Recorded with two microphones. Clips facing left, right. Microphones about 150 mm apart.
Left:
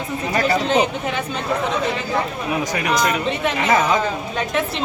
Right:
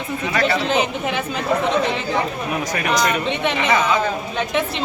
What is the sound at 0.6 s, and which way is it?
Speech, 35° left (ahead or behind).